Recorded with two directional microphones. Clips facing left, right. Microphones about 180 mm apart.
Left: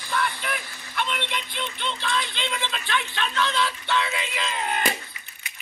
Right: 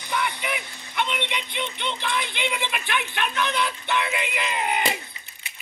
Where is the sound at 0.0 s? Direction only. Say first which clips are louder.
Even; 20° right (ahead or behind).